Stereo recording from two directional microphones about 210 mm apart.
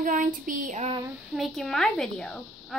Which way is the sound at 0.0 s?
40° right (ahead or behind).